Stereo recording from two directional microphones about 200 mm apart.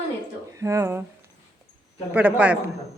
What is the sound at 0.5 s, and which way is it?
Speech, 15° right (ahead or behind).